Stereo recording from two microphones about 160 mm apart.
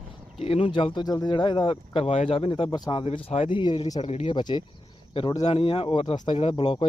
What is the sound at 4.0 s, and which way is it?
Speech, 40° left (ahead or behind).